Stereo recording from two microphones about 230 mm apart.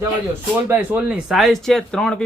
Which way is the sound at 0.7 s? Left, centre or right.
Centre.